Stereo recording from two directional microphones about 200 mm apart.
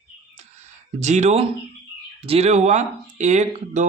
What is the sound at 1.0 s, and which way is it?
Speech, 35° right (ahead or behind).